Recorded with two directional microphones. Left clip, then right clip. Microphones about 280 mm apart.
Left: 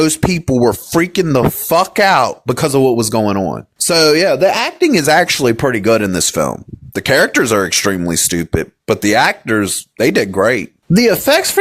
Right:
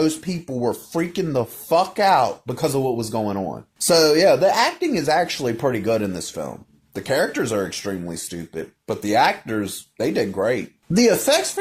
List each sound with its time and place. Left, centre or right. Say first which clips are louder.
0.0 s speech: left 8 dB; left